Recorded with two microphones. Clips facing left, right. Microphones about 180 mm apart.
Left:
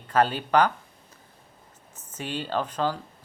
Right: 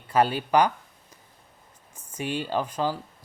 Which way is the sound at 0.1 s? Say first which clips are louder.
Even; 10° right (ahead or behind).